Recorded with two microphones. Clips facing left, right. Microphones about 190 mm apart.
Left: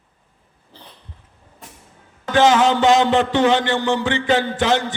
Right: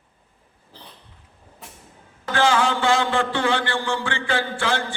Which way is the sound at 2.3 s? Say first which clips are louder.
Left 6 dB; 20° left (ahead or behind).